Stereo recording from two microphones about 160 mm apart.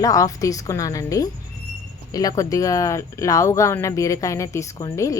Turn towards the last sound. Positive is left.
turn(degrees=20)  # may be behind; listen again after turning